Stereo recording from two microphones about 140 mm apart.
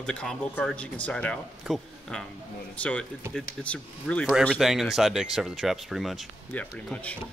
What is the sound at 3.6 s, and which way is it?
Speech, 10° left (ahead or behind).